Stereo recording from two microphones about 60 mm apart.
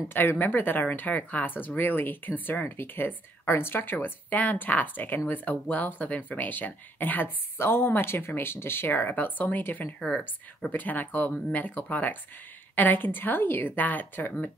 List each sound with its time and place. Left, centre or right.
0.1 s speech: left
9.9 s speech: centre
10.7 s speech: left